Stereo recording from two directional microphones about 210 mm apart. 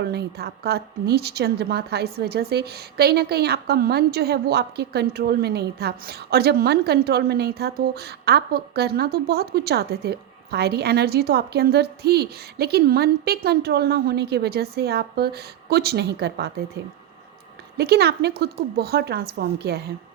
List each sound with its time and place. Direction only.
0.0 s a woman's voice: 50° right (ahead or behind)
17.7 s a woman's voice: 50° right (ahead or behind)